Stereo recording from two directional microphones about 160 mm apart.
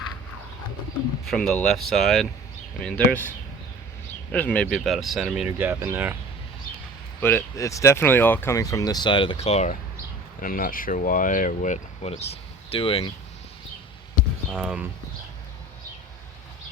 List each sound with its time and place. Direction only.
1.2 s speech: 5° left (ahead or behind); by 6.1 s 15° right (ahead or behind)
6.7 s a sound: 60° left (ahead or behind)
7.2 s speech: 15° left (ahead or behind); by 9.7 s 45° left (ahead or behind)
10.4 s speech: 60° left (ahead or behind)
12.7 s speech: 35° left (ahead or behind)
14.5 s speech: 5° right (ahead or behind)